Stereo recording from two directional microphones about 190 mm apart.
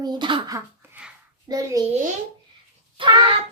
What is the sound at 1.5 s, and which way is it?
Speech, 20° right (ahead or behind).